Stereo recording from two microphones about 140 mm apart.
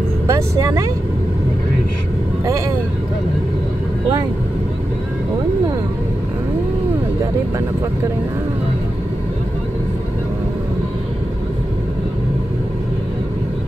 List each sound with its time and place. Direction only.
0.3 s speech: 25° right (ahead or behind)